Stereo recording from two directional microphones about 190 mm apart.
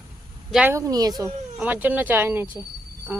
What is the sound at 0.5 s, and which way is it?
Speech, 10° right (ahead or behind).